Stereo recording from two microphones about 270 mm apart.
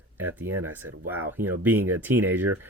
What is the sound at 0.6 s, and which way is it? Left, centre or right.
Speech, centre.